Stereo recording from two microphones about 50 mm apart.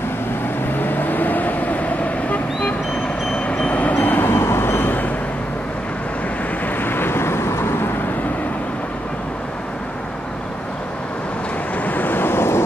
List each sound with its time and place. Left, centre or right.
0.7 s vehicle: left
3.8 s train: left
4.3 s vehicle: left
6.8 s vehicle: left
11.8 s vehicle: left